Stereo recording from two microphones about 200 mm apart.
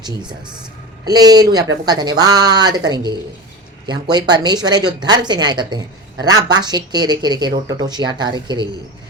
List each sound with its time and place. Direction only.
0.0 s speech: 20° right (ahead or behind)